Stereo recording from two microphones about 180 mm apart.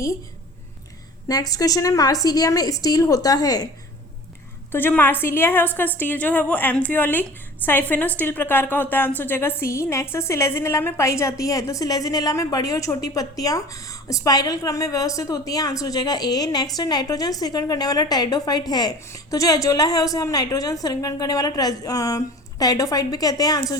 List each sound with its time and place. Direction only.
1.3 s a woman's voice: 20° left (ahead or behind)
4.7 s a woman's voice: 10° left (ahead or behind)